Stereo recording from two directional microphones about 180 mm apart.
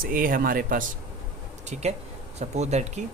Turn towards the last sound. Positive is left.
turn(degrees=-40)  # may be behind; listen again after turning